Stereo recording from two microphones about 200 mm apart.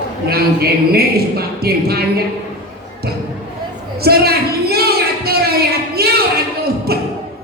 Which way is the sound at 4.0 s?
50° right (ahead or behind).